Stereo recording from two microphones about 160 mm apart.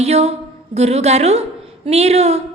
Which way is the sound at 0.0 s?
40° right (ahead or behind).